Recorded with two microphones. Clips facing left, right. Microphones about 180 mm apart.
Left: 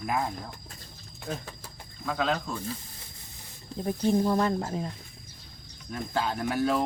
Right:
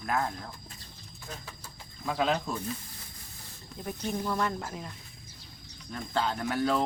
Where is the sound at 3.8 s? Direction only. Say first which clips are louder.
Left 9 dB; 30° left (ahead or behind).